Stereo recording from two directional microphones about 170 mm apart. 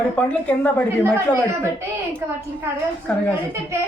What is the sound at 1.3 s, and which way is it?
A woman's voice, 15° right (ahead or behind).